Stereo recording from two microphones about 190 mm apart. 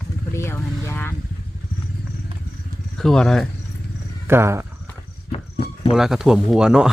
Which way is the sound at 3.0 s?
5° left (ahead or behind).